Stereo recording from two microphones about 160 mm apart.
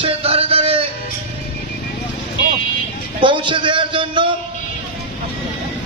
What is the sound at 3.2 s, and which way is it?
A man's voice, 30° right (ahead or behind).